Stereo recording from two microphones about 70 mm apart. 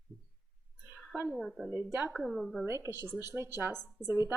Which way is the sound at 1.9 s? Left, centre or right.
Right.